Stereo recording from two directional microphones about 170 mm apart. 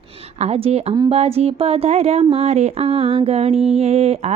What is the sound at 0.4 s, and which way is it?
Speech, 35° right (ahead or behind).